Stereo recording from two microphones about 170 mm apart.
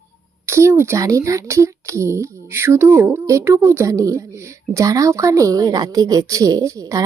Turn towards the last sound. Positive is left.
turn(degrees=-20)  # may be behind; listen again after turning